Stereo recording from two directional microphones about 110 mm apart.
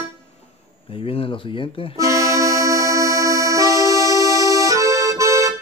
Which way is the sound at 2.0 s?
30° right (ahead or behind).